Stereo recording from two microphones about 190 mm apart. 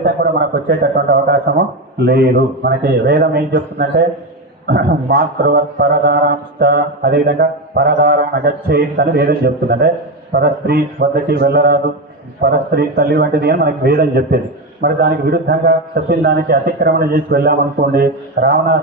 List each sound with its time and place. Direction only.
0.0 s a man's voice: 55° right (ahead or behind)